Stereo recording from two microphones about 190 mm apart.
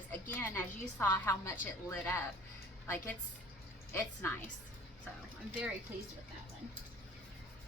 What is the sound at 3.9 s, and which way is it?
Speech, 10° left (ahead or behind).